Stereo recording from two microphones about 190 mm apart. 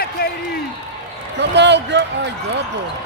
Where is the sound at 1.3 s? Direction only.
65° right (ahead or behind).